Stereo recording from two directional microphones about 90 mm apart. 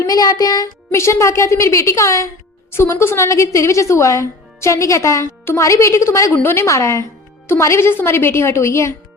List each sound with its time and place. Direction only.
0.0 s child singing: 45° left (ahead or behind)
0.9 s a woman's voice: 30° left (ahead or behind)